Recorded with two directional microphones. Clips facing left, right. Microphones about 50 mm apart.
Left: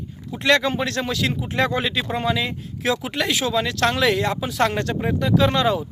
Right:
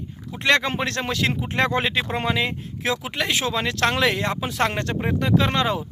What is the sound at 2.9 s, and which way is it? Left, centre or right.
Speech, right.